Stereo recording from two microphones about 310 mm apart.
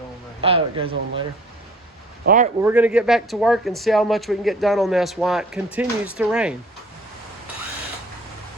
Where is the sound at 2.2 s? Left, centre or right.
Right.